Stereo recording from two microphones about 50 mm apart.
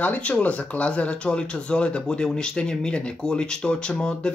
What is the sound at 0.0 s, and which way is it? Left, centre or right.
Speech, left.